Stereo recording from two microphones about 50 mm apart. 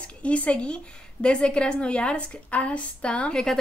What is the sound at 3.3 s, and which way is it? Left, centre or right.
Speech, centre.